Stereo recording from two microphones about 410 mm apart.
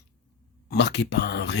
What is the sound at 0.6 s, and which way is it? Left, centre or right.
Speech, left.